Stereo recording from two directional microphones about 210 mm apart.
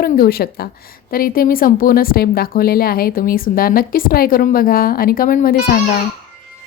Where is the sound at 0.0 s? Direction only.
45° left (ahead or behind).